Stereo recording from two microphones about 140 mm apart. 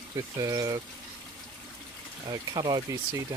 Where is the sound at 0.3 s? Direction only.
25° right (ahead or behind).